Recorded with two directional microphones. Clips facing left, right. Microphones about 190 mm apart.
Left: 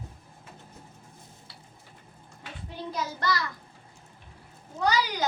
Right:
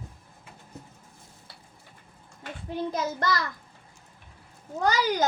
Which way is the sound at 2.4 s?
45° right (ahead or behind).